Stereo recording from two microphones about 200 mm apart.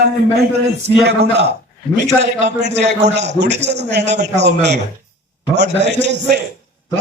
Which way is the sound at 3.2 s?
60° right (ahead or behind).